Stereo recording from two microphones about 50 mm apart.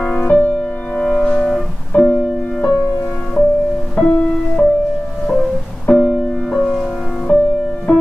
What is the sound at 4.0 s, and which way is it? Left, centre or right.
Music, centre.